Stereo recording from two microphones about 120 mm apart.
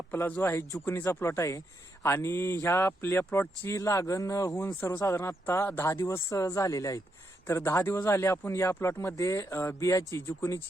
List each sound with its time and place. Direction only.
0.1 s speech: 15° left (ahead or behind)